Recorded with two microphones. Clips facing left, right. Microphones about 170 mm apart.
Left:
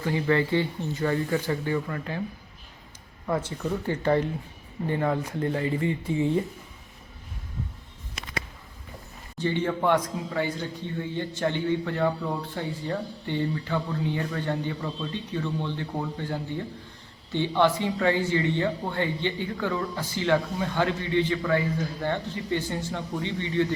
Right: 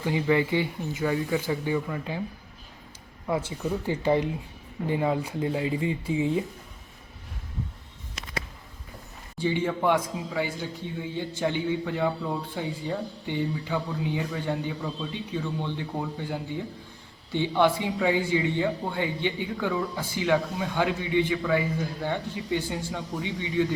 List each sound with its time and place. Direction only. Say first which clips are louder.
0.0 s a man's voice: even; 15° right (ahead or behind)
3.2 s a man's voice: even; 10° right (ahead or behind)
9.4 s a man's voice: even; 10° right (ahead or behind)